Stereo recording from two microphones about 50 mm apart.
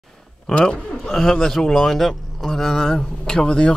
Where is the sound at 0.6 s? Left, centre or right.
Centre.